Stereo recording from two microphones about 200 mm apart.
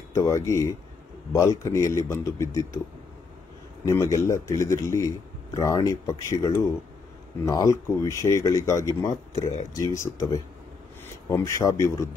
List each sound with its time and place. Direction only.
0.1 s a man's voice: 15° left (ahead or behind)
3.8 s a man's voice: 15° left (ahead or behind)
9.3 s speech: 35° left (ahead or behind)
10.0 s a man's voice: 15° left (ahead or behind)